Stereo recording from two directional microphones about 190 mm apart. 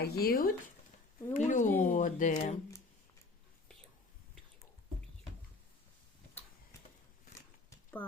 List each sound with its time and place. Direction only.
0.0 s speech: 55° left (ahead or behind)
1.3 s speech: 40° left (ahead or behind)